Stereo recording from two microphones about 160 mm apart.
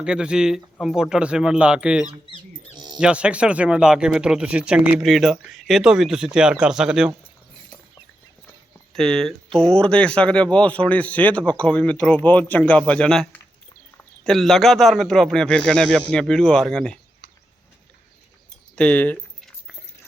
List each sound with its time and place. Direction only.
0.0 s speech: 5° right (ahead or behind)
2.7 s music: 25° right (ahead or behind)
3.0 s speech: 5° right (ahead or behind)
8.9 s speech: 5° left (ahead or behind)
18.8 s a sound: 10° left (ahead or behind)